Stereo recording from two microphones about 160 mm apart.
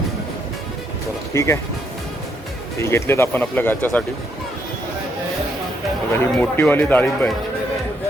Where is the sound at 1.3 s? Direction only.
15° left (ahead or behind).